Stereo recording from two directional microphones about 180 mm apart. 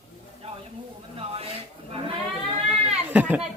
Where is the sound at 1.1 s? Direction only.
30° right (ahead or behind).